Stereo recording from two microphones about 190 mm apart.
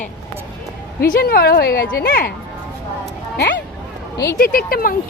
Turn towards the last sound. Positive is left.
turn(degrees=50)  # may be behind; listen again after turning